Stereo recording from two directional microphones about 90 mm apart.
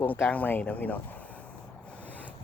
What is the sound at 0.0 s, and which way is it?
Speech, 20° left (ahead or behind).